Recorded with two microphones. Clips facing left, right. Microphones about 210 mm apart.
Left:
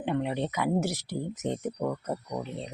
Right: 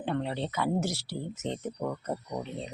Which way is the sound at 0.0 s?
15° left (ahead or behind).